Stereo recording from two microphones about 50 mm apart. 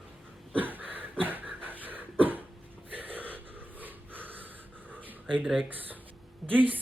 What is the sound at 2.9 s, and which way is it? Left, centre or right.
Snort, right.